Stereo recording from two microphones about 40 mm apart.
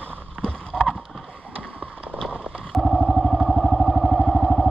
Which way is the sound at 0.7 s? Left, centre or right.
Centre.